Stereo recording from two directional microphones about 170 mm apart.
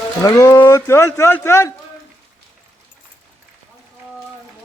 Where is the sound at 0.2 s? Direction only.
20° left (ahead or behind).